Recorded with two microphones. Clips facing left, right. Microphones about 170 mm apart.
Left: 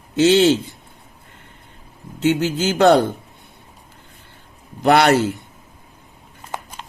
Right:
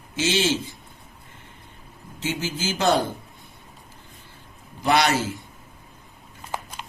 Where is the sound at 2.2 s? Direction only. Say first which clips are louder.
Left 10 dB; 65° left (ahead or behind).